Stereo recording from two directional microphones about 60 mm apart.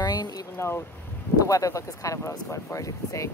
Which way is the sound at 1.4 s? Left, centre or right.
Left.